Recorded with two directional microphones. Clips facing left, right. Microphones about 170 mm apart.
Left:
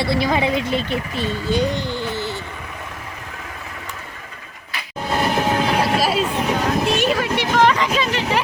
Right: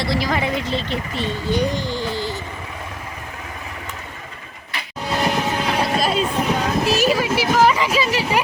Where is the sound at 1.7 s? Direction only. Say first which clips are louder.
Even; 60° left (ahead or behind).